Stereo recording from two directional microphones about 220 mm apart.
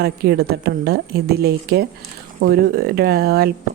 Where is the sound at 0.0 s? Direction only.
45° right (ahead or behind).